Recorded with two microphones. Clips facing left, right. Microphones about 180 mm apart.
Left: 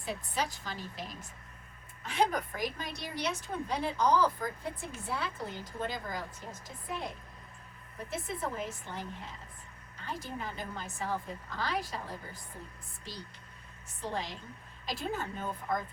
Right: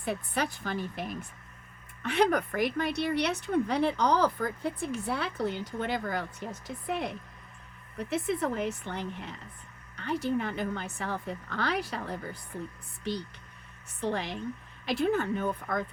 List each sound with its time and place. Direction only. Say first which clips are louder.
0.0 s a woman's voice: right 4 dB; 60° right (ahead or behind)
14.0 s a woman's voice: right 6 dB; 65° right (ahead or behind)